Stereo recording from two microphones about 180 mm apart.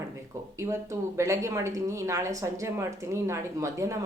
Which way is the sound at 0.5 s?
15° right (ahead or behind).